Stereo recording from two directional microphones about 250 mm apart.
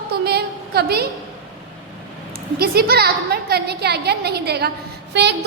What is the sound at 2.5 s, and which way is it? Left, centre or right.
A woman's voice, right.